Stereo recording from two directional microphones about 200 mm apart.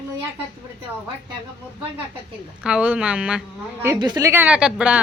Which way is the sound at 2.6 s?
5° right (ahead or behind).